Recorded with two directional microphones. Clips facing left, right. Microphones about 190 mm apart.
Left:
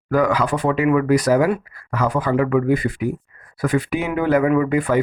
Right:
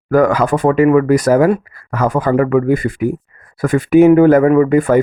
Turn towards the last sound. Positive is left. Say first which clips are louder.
# right 7 dB
turn(degrees=-45)  # may be behind; listen again after turning